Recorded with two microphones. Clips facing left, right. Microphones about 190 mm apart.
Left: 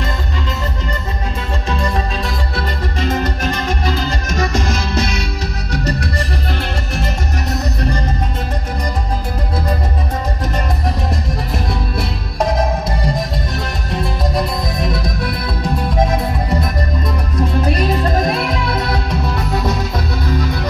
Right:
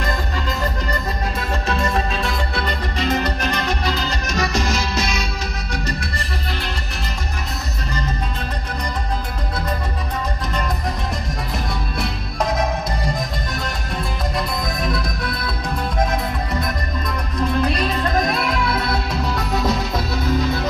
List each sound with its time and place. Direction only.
2.5 s music: 45° left (ahead or behind)
5.7 s music: 40° left (ahead or behind)